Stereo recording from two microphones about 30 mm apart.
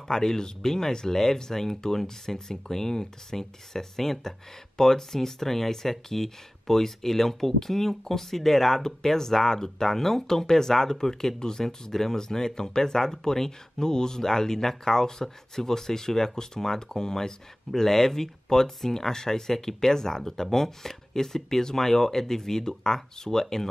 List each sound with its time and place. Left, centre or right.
0.1 s speech: centre